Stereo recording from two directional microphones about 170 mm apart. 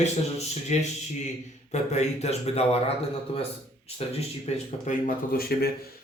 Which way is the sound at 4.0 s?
35° left (ahead or behind).